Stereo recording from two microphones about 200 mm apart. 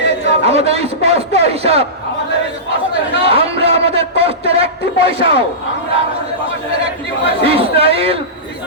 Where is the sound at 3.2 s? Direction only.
30° right (ahead or behind).